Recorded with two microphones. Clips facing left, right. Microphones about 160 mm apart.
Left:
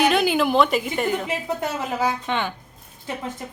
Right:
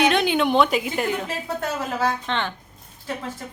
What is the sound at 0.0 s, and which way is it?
A woman's voice, centre (ahead or behind).